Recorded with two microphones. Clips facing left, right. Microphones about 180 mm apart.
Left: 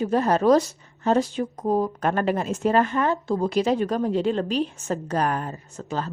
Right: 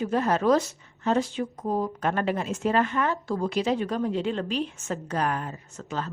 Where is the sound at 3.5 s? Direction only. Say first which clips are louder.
Left 4 dB; 40° left (ahead or behind).